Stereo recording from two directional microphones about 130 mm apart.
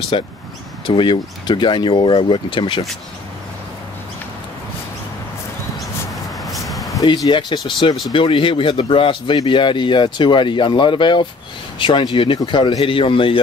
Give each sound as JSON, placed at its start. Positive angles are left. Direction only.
{"t": 0.1, "sound": "speech", "side_deg": 40}
{"t": 6.5, "sound": "a sound", "side_deg": 0}
{"t": 7.2, "sound": "speech", "side_deg": 35}